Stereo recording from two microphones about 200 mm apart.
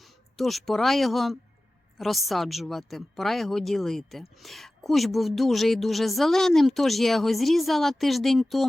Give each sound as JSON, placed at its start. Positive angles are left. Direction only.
{"t": 0.0, "sound": "a woman's voice", "side_deg": 0}